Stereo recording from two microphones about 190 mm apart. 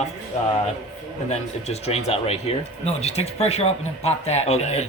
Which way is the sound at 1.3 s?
35° left (ahead or behind).